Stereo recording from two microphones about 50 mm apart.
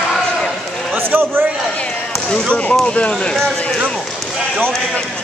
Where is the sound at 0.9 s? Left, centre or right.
Right.